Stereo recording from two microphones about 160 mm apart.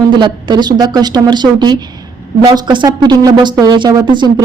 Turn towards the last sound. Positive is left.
turn(degrees=-30)  # may be behind; listen again after turning